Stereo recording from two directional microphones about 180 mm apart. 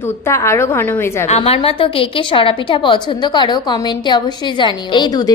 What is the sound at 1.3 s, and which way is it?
A woman's voice, 35° left (ahead or behind).